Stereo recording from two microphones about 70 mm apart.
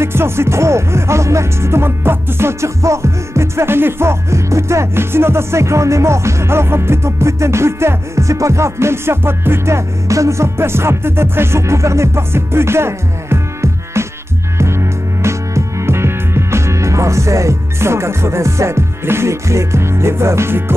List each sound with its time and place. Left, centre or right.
0.0 s music: right